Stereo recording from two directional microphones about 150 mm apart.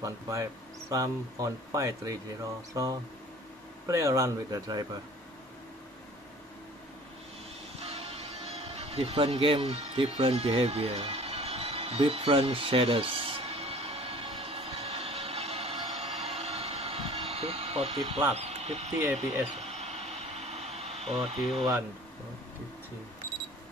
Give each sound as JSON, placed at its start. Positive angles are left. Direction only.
{"t": 0.0, "sound": "speech", "side_deg": -20}
{"t": 7.8, "sound": "music", "side_deg": -40}
{"t": 17.9, "sound": "speech", "side_deg": -35}
{"t": 18.3, "sound": "speech", "side_deg": -45}
{"t": 19.5, "sound": "a sound", "side_deg": -45}
{"t": 21.2, "sound": "speech", "side_deg": 0}